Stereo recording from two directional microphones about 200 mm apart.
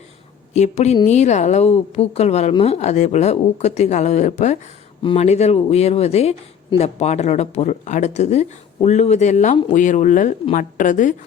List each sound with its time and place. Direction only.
0.5 s speech: 35° left (ahead or behind)